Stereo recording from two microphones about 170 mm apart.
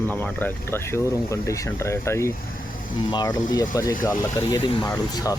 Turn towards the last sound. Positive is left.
turn(degrees=20)  # may be behind; listen again after turning